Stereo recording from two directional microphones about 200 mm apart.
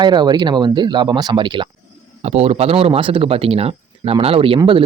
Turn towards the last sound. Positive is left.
turn(degrees=-25)  # may be behind; listen again after turning